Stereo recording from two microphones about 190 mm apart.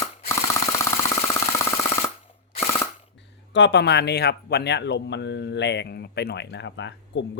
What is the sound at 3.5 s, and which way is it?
Speech, 65° left (ahead or behind).